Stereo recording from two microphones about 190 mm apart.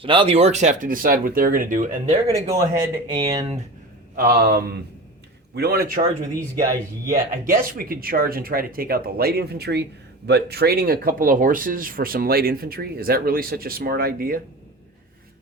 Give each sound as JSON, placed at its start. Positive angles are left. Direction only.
{"t": 0.0, "sound": "speech", "side_deg": -25}
{"t": 2.2, "sound": "speech", "side_deg": -15}
{"t": 4.1, "sound": "speech", "side_deg": -50}
{"t": 7.4, "sound": "speech", "side_deg": -45}